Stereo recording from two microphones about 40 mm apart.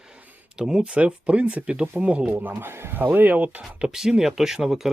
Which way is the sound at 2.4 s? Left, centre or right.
Right.